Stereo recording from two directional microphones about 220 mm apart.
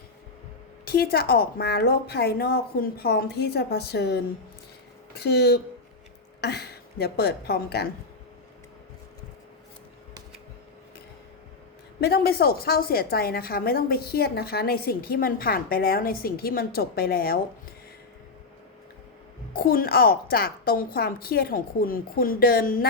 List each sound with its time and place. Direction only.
0.9 s a woman's voice: 45° left (ahead or behind)
11.9 s a woman's voice: 45° left (ahead or behind)
19.5 s a woman's voice: 40° left (ahead or behind)